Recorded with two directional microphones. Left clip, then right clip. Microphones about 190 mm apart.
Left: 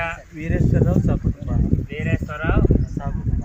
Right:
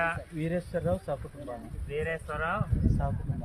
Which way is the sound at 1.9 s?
40° left (ahead or behind).